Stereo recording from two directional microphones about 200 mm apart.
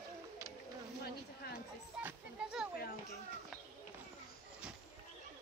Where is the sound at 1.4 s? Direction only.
50° left (ahead or behind).